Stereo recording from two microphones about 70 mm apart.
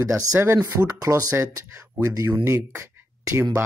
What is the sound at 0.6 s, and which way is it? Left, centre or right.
Speech, right.